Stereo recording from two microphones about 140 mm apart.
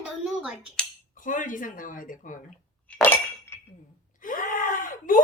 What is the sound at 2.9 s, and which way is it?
Chink, 10° left (ahead or behind).